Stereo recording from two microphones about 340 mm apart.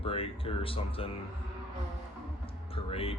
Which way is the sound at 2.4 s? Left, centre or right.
Centre.